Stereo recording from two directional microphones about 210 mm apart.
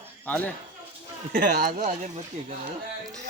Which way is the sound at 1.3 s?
40° right (ahead or behind).